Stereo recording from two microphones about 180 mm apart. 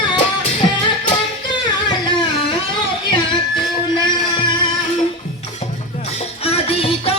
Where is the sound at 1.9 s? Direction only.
25° left (ahead or behind).